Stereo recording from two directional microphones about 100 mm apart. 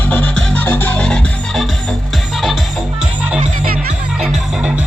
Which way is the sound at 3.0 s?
15° right (ahead or behind).